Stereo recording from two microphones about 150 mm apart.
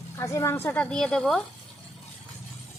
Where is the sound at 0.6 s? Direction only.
10° left (ahead or behind).